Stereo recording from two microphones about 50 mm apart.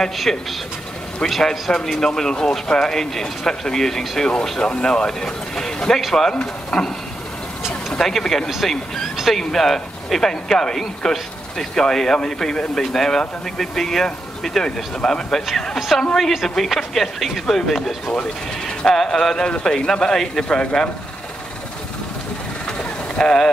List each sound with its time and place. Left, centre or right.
0.0 s speech: centre
7.9 s speech: centre
15.0 s speech: centre
22.7 s vehicle: centre